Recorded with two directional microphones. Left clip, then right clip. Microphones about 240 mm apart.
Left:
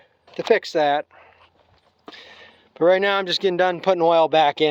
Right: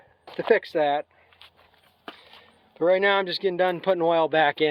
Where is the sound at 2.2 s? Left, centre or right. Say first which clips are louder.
Left 7 dB; left.